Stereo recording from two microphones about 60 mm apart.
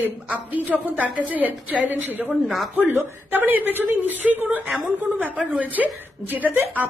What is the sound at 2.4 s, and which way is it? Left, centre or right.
Speech, centre.